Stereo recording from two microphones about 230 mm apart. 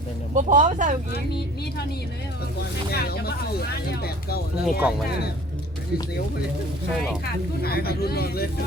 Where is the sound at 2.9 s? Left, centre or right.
Left.